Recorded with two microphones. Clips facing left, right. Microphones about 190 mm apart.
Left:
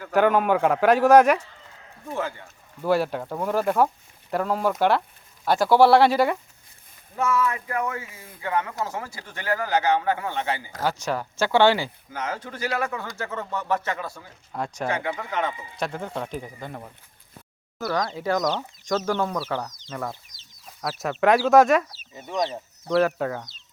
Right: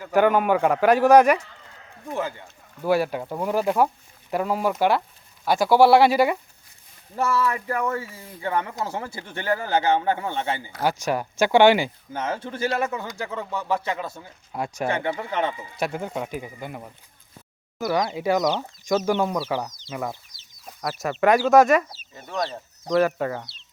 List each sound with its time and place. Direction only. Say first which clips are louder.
0.0 s speech: right 1 dB; centre (ahead or behind)
2.0 s speech: right 1 dB; 15° right (ahead or behind)
7.2 s speech: right 1 dB; 35° right (ahead or behind)
10.8 s speech: right 2 dB; 15° right (ahead or behind)
12.1 s speech: right 3 dB; 30° right (ahead or behind)
14.5 s speech: right 2 dB; 10° right (ahead or behind)
14.8 s speech: right 3 dB; 30° right (ahead or behind)
15.8 s speech: right 2 dB; 10° right (ahead or behind)
20.8 s speech: right 1 dB; centre (ahead or behind)
22.4 s speech: left 2 dB; 15° left (ahead or behind)
22.9 s speech: right 1 dB; centre (ahead or behind)